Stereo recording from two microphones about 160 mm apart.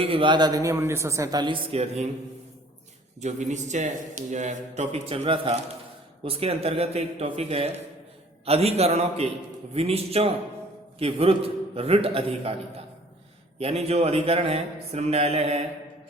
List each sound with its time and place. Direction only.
0.0 s a woman's voice: 35° right (ahead or behind)
3.2 s a man's voice: 45° right (ahead or behind)
13.6 s a man's voice: 40° right (ahead or behind)